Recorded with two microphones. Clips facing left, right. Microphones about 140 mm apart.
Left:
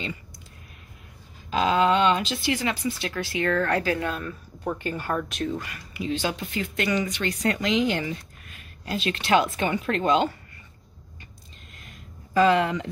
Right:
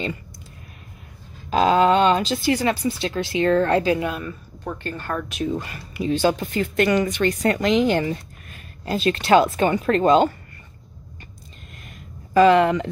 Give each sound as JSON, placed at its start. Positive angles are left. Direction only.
{"t": 1.5, "sound": "speech", "side_deg": -40}
{"t": 4.1, "sound": "speech", "side_deg": -5}
{"t": 4.6, "sound": "speech", "side_deg": 10}
{"t": 5.6, "sound": "speech", "side_deg": -30}
{"t": 12.4, "sound": "speech", "side_deg": -65}